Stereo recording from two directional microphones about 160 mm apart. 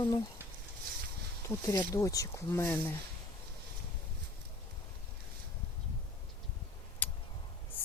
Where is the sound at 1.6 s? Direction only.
20° left (ahead or behind).